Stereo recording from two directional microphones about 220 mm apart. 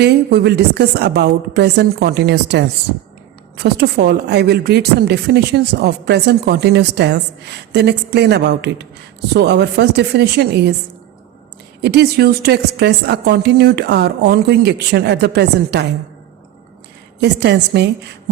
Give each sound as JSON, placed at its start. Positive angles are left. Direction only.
{"t": 0.0, "sound": "a woman's voice", "side_deg": -50}
{"t": 11.8, "sound": "a woman's voice", "side_deg": -50}
{"t": 17.2, "sound": "a woman's voice", "side_deg": -50}